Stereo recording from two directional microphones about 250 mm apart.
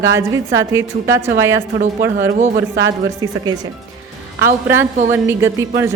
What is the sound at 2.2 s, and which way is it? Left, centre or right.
Speech, right.